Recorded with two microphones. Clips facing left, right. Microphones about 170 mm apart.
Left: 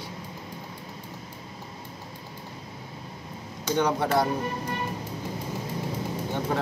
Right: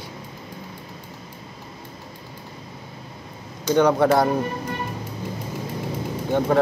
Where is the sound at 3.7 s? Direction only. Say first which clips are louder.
Right 7 dB; 65° right (ahead or behind).